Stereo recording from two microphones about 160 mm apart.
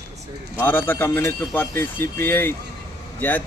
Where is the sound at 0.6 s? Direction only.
15° left (ahead or behind).